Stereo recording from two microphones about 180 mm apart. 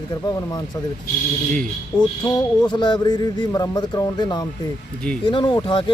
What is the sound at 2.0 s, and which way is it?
Speech, 20° left (ahead or behind).